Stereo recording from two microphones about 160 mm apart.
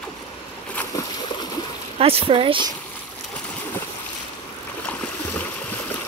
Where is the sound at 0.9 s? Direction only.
25° left (ahead or behind).